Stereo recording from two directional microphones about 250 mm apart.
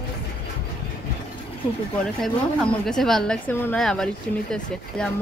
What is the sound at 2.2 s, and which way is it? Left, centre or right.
Speech, centre.